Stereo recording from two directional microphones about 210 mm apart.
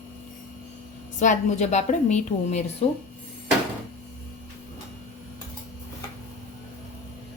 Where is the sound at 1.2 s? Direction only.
35° left (ahead or behind).